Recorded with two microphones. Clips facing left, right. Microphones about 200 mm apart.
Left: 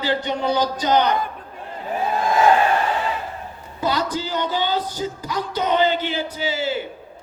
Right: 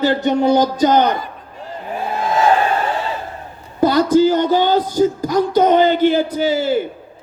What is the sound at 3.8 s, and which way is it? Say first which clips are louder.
Speech: right 12 dB; 45° right (ahead or behind).